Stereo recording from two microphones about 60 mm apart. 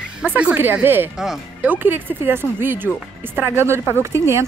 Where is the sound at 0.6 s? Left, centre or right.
Right.